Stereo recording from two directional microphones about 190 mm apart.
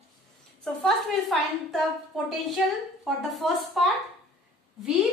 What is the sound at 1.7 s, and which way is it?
A woman's voice, centre (ahead or behind).